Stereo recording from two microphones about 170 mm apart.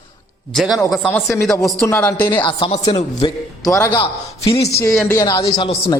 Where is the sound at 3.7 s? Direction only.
20° left (ahead or behind).